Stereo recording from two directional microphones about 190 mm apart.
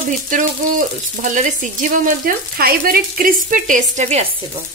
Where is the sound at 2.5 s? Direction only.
50° right (ahead or behind).